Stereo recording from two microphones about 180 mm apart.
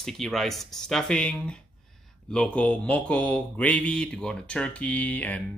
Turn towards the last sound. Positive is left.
turn(degrees=10)  # may be behind; listen again after turning